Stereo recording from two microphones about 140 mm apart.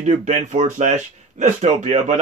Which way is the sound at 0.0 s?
55° right (ahead or behind).